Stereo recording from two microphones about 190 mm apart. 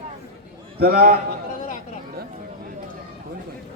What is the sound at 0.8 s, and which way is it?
Speech, 55° right (ahead or behind).